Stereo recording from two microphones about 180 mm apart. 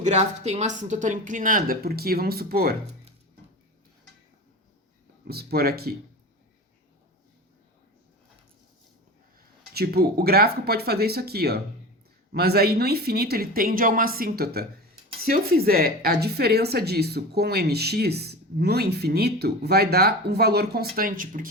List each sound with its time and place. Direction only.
0.0 s speech: 40° right (ahead or behind); by 2.7 s 60° right (ahead or behind)
5.3 s a woman's voice: 60° right (ahead or behind)
9.7 s a woman's voice: 60° right (ahead or behind)